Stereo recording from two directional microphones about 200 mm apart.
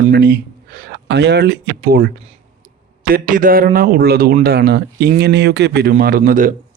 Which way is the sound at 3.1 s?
40° right (ahead or behind).